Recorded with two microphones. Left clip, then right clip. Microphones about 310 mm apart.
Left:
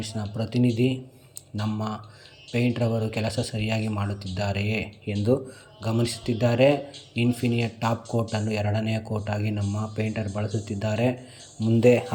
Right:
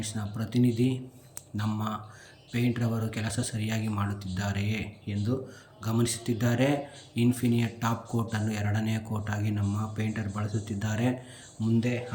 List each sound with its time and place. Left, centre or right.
0.0 s speech: centre